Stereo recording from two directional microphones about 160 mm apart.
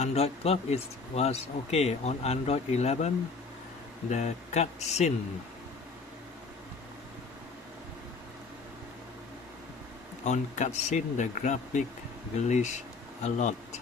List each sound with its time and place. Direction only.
0.0 s speech: 40° left (ahead or behind)
4.1 s speech: 45° left (ahead or behind)
10.2 s speech: 45° left (ahead or behind)